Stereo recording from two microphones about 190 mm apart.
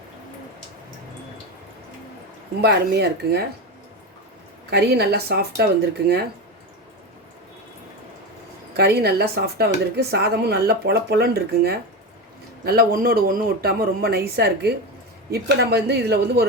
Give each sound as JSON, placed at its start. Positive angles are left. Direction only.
{"t": 2.6, "sound": "speech", "side_deg": -60}
{"t": 4.7, "sound": "speech", "side_deg": -60}
{"t": 8.7, "sound": "speech", "side_deg": -55}